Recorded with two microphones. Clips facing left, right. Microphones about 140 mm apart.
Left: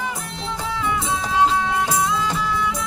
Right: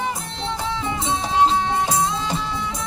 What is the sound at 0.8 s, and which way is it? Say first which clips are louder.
Music: left 1 dB; 30° right (ahead or behind).